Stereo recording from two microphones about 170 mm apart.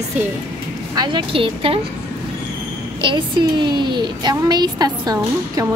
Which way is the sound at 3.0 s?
25° right (ahead or behind).